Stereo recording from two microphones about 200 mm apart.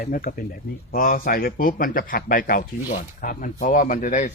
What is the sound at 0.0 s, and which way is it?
Speech, 45° left (ahead or behind).